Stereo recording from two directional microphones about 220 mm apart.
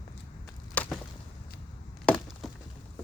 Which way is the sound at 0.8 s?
5° left (ahead or behind).